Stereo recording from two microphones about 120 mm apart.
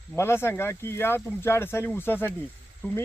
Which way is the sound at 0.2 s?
20° left (ahead or behind).